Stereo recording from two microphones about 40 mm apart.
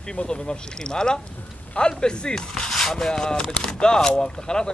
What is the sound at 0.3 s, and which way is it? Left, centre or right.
Speech, centre.